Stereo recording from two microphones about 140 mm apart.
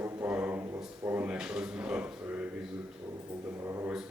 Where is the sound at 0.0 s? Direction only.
15° right (ahead or behind).